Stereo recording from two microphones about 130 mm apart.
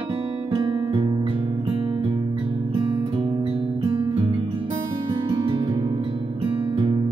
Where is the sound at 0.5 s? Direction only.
40° right (ahead or behind).